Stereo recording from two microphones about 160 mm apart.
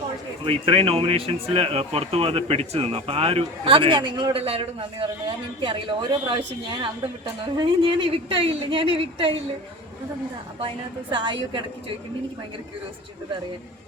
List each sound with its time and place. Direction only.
0.4 s speech: 35° right (ahead or behind)
11.1 s a woman's voice: 30° right (ahead or behind)